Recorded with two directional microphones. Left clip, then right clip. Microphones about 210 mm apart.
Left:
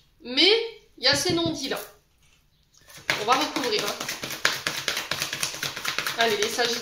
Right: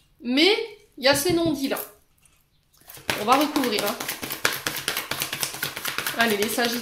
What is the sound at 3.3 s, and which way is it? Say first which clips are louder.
Speech: right 3 dB; 50° right (ahead or behind).